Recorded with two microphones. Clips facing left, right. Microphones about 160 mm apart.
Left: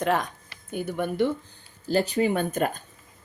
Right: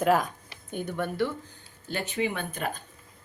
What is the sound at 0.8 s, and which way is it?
Speech, 10° left (ahead or behind).